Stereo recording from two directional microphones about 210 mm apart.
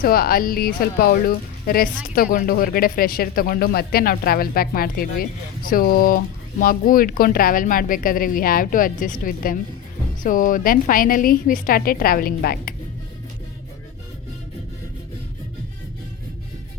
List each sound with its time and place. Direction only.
0.0 s speech: 45° left (ahead or behind)